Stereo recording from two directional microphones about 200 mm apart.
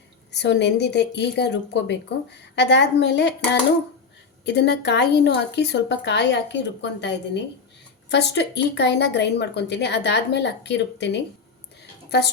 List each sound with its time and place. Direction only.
0.3 s speech: 60° left (ahead or behind)
8.1 s speech: 60° left (ahead or behind)